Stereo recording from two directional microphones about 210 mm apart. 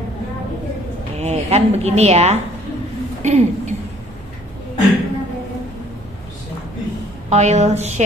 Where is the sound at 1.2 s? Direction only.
30° right (ahead or behind).